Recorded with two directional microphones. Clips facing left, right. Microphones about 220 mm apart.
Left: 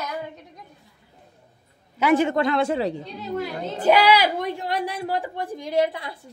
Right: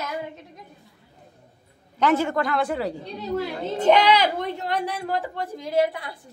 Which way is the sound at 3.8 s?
5° left (ahead or behind).